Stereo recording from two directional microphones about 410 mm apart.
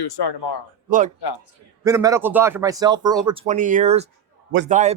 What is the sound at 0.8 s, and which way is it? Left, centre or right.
Speech, centre.